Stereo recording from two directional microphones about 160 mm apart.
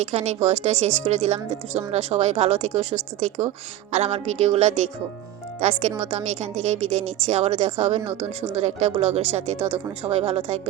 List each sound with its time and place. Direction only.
0.0 s a woman's voice: 45° right (ahead or behind)